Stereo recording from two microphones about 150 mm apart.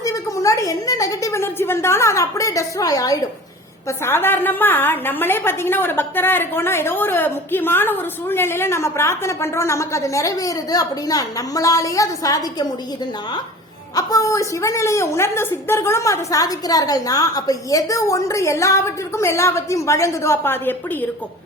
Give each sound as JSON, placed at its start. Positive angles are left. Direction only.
{"t": 0.0, "sound": "a sound", "side_deg": 20}
{"t": 3.8, "sound": "a woman's voice", "side_deg": 15}
{"t": 13.9, "sound": "a woman's voice", "side_deg": 25}